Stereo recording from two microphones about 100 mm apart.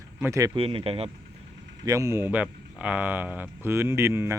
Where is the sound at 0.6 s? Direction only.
70° right (ahead or behind).